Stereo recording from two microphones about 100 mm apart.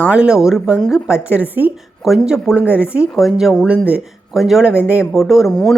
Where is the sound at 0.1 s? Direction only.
10° right (ahead or behind).